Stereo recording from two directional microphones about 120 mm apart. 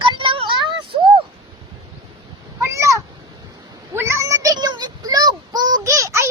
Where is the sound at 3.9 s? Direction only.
20° right (ahead or behind).